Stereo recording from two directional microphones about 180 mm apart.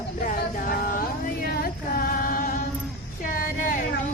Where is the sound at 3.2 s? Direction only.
50° left (ahead or behind).